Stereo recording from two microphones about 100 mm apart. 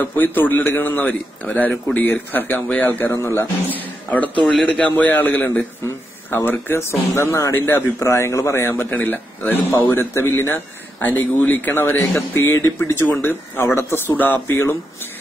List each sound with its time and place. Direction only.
0.0 s speech: 20° left (ahead or behind)
3.1 s a man's voice: 30° left (ahead or behind)
12.2 s speech: 30° left (ahead or behind)